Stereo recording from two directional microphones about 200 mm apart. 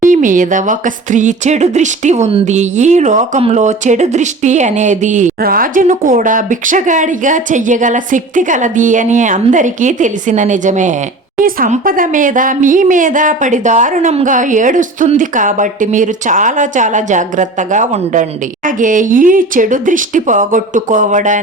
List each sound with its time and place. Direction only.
0.0 s speech: 40° right (ahead or behind)